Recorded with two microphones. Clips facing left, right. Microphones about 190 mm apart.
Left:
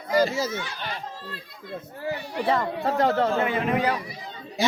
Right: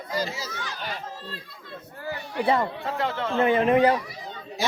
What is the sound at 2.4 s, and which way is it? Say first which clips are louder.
Speech: right 1 dB; 20° right (ahead or behind).